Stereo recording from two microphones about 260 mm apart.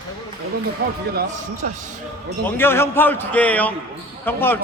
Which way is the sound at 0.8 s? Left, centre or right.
Right.